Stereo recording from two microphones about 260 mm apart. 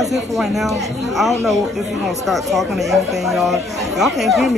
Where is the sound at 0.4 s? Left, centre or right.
Centre.